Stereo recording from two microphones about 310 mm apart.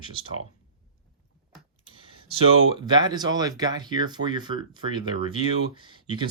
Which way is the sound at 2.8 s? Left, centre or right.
Centre.